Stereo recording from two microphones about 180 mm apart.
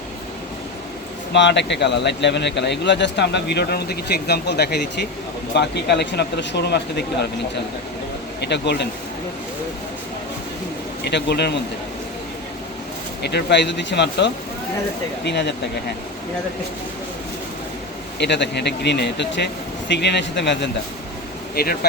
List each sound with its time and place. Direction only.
1.3 s a man's voice: 75° left (ahead or behind)
8.4 s a man's voice: 70° left (ahead or behind)
11.0 s a man's voice: 70° left (ahead or behind)
13.2 s a man's voice: 70° left (ahead or behind)
18.2 s a man's voice: 75° left (ahead or behind)
21.5 s speech: 60° left (ahead or behind)